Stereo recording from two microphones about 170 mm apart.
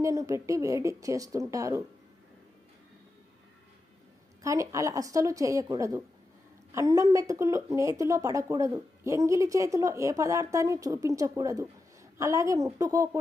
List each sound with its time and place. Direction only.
0.0 s speech: 20° right (ahead or behind)
4.4 s a woman's voice: 20° right (ahead or behind)